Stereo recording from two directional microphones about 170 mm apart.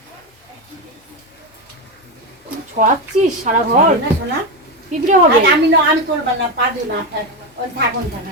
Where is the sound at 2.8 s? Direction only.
50° right (ahead or behind).